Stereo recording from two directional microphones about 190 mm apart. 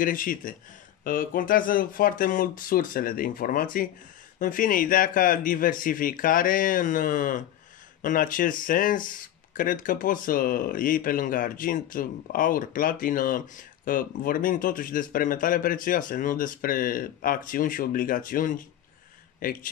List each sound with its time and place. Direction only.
0.0 s speech: 45° left (ahead or behind)